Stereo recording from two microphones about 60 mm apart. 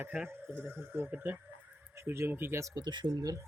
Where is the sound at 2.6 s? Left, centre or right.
Right.